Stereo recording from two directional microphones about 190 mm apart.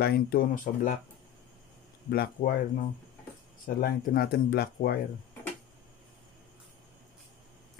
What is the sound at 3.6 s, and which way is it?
Speech, 50° left (ahead or behind).